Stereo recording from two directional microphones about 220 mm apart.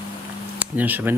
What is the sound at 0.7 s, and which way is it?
Speech, 5° right (ahead or behind).